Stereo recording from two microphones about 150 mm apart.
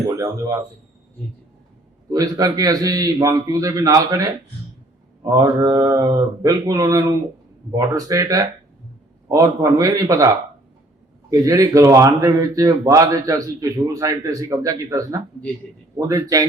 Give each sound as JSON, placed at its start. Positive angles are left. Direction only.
{"t": 0.2, "sound": "a man's voice", "side_deg": -20}
{"t": 2.0, "sound": "a man's voice", "side_deg": -25}
{"t": 5.3, "sound": "a man's voice", "side_deg": -25}
{"t": 11.3, "sound": "a man's voice", "side_deg": -25}